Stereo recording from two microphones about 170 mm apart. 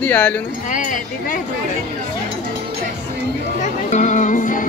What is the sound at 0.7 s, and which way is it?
Speech, 50° left (ahead or behind).